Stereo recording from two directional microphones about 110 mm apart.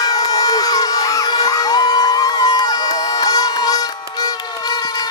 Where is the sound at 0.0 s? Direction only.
35° left (ahead or behind).